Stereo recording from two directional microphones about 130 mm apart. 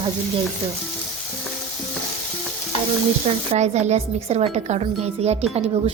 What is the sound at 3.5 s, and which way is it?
Speech, 60° right (ahead or behind).